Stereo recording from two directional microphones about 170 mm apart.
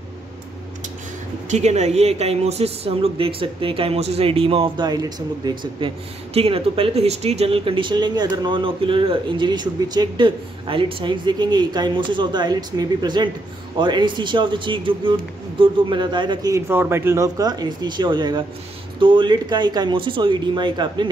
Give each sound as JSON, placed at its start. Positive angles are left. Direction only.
{"t": 1.5, "sound": "speech", "side_deg": -40}